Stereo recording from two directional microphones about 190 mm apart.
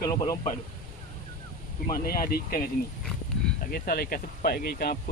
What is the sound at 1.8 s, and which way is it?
Speech, 50° left (ahead or behind).